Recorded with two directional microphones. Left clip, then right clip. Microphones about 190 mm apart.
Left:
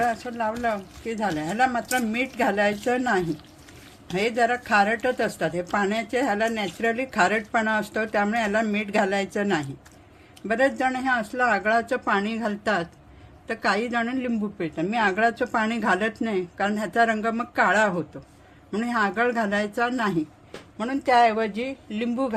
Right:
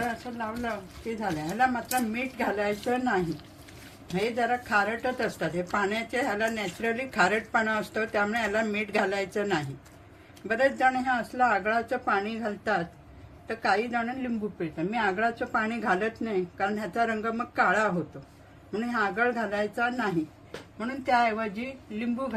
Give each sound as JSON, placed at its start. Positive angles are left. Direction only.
{"t": 1.2, "sound": "a woman's voice", "side_deg": 55}